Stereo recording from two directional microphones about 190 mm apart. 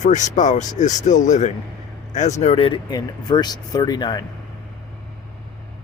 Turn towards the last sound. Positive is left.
turn(degrees=20)  # may be behind; listen again after turning